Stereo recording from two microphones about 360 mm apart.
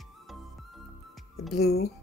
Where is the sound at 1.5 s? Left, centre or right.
Left.